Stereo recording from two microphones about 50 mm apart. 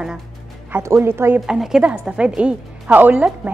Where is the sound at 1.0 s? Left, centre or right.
Right.